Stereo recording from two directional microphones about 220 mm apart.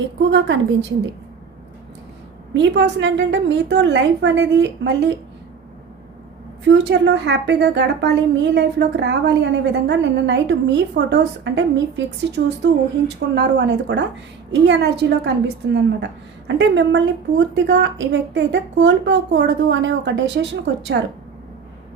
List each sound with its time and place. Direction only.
0.2 s a woman's voice: 55° right (ahead or behind)
2.5 s a woman's voice: 55° right (ahead or behind)
6.7 s a woman's voice: 50° right (ahead or behind)